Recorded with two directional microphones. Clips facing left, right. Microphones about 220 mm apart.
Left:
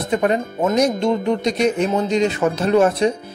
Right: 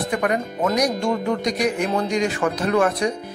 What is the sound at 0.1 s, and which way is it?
Speech, 25° left (ahead or behind).